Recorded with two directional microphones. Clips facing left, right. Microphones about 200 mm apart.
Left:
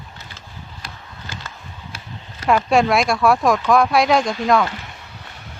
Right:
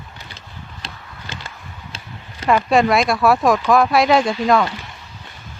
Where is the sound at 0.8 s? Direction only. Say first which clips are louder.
Right 1 dB; 20° right (ahead or behind).